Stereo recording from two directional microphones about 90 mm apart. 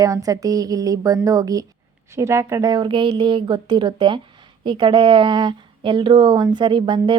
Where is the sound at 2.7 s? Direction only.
65° right (ahead or behind).